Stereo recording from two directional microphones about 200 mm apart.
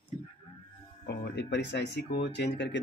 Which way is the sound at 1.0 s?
55° left (ahead or behind).